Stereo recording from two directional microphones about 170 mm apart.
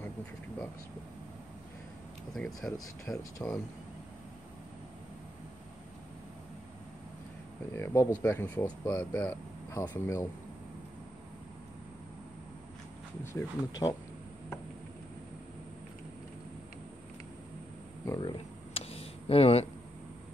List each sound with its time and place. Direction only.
2.3 s speech: centre (ahead or behind)
3.1 s speech: 20° left (ahead or behind)
7.7 s speech: 15° left (ahead or behind)
13.2 s speech: 15° left (ahead or behind)
18.0 s a sound: 20° left (ahead or behind)
18.7 s a sound: 35° left (ahead or behind)